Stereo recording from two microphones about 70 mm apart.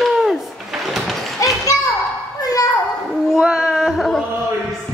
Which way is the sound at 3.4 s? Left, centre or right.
Centre.